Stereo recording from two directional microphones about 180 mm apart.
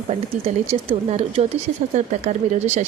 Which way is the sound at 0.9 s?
35° right (ahead or behind).